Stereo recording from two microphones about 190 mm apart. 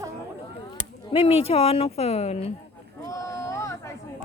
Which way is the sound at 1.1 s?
30° left (ahead or behind).